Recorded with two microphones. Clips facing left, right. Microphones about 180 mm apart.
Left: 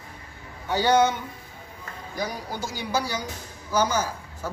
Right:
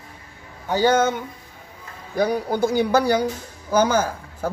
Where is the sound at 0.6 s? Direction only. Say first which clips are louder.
Right 2 dB; 50° right (ahead or behind).